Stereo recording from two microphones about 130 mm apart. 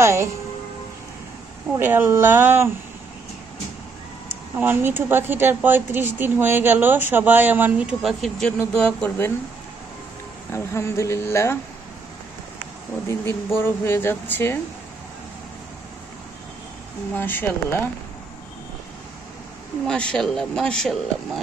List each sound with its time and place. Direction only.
0.0 s a woman's voice: 20° right (ahead or behind)
1.7 s speech: 15° right (ahead or behind)
4.6 s speech: 15° right (ahead or behind); by 9.3 s 10° left (ahead or behind)
10.5 s a woman's voice: 20° left (ahead or behind)
13.6 s speech: 15° left (ahead or behind)
17.1 s speech: 15° left (ahead or behind)
19.9 s speech: 5° left (ahead or behind)